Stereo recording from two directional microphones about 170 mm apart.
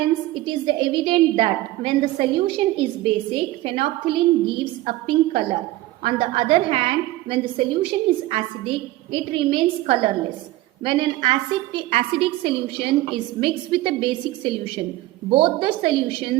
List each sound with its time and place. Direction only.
0.4 s a woman's voice: 30° right (ahead or behind)